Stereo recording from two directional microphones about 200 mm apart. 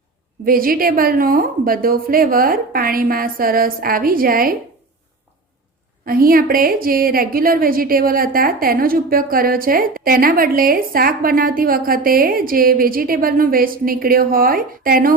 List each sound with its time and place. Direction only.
0.4 s a woman's voice: 45° right (ahead or behind)
6.1 s a woman's voice: 45° right (ahead or behind)